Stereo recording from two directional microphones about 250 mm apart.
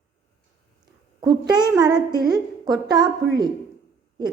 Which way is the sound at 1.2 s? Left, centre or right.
Centre.